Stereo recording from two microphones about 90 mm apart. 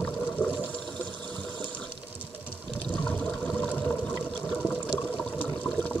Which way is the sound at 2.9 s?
10° left (ahead or behind).